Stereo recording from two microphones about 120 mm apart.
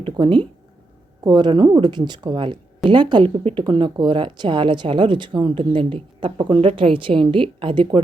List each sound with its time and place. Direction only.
0.0 s a woman's voice: 45° right (ahead or behind)